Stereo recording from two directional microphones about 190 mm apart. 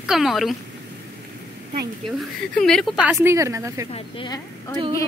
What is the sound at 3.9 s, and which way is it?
Speech, 25° left (ahead or behind).